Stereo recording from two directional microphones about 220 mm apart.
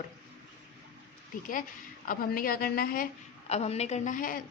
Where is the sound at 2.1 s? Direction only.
40° left (ahead or behind).